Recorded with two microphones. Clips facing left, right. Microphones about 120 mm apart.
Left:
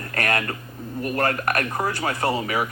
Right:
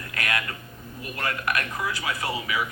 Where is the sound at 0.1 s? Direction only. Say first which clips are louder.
Left 5 dB; 50° left (ahead or behind).